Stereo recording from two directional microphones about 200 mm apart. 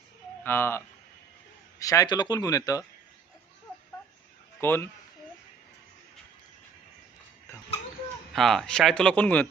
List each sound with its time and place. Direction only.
0.4 s speech: 10° left (ahead or behind)
1.8 s speech: 15° left (ahead or behind)
4.6 s speech: 10° left (ahead or behind)
8.3 s speech: centre (ahead or behind)